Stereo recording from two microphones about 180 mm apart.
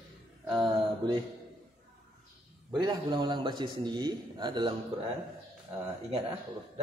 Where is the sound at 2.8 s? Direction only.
25° right (ahead or behind).